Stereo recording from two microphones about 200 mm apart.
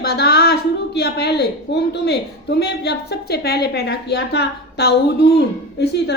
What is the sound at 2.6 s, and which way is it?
A woman's voice, 55° left (ahead or behind).